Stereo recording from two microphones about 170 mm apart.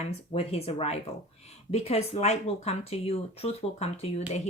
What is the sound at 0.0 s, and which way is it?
Speech, 40° left (ahead or behind).